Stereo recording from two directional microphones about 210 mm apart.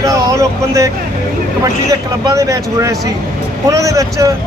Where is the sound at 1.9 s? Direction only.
15° right (ahead or behind).